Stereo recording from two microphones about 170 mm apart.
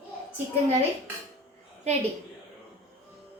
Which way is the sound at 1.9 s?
40° right (ahead or behind).